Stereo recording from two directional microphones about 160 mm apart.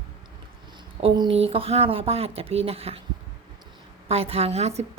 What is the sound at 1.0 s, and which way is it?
Speech, 30° right (ahead or behind).